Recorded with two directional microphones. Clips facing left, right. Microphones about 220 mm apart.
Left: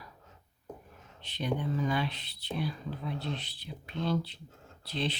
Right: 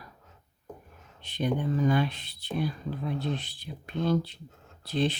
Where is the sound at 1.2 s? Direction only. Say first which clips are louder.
Right 4 dB; 50° right (ahead or behind).